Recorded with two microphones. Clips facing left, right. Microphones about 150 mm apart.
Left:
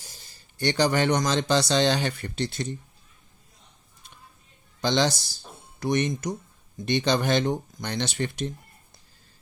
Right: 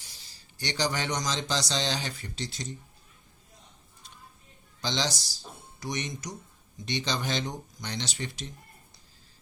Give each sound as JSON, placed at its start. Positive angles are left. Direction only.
{"t": 0.0, "sound": "a man's voice", "side_deg": 50}
{"t": 4.8, "sound": "speech", "side_deg": 55}